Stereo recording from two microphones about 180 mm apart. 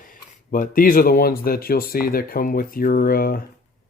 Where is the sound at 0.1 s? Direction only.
50° left (ahead or behind).